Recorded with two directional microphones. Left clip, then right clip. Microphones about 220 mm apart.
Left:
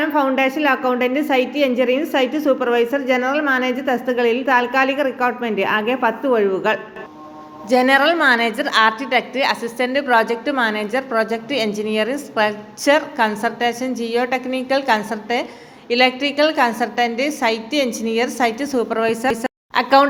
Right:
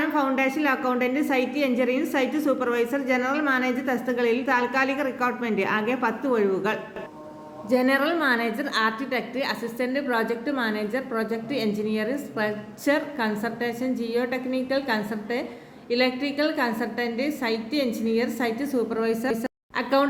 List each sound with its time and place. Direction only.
0.0 s a woman's voice: 5° left (ahead or behind)